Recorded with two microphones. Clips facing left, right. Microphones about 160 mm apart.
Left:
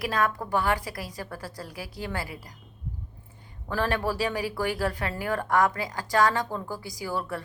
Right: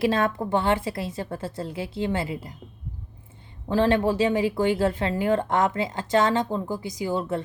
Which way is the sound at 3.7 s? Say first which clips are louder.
Right 7 dB; 20° right (ahead or behind).